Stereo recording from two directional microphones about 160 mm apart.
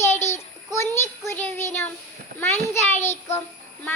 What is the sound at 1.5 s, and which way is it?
Child singing, 15° left (ahead or behind).